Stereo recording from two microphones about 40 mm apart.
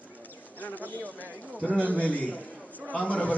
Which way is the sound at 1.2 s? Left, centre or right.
Right.